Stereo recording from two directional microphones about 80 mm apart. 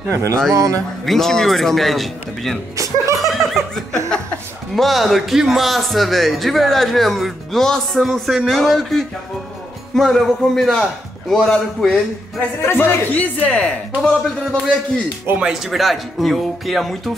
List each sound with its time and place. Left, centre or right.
0.1 s speech: right
1.0 s speech: centre
2.7 s speech: right
3.3 s laughter: centre
4.7 s speech: centre
12.4 s speech: left
13.5 s a man's voice: centre
15.3 s speech: centre